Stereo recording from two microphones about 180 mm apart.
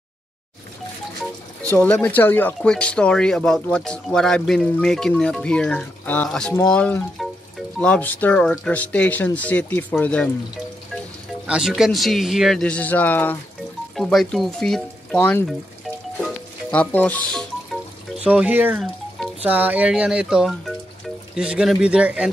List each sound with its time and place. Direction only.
1.7 s speech: 10° left (ahead or behind)
11.4 s speech: 5° right (ahead or behind)
16.7 s speech: 10° left (ahead or behind)
18.2 s speech: 5° right (ahead or behind)